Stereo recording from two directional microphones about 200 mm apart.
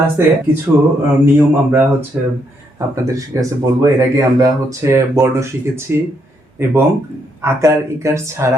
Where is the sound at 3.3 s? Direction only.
15° right (ahead or behind).